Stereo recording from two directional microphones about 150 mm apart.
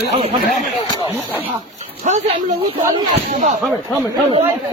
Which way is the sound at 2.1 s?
50° right (ahead or behind).